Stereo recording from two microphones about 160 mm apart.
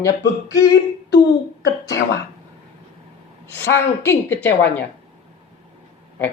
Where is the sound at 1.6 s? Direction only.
90° left.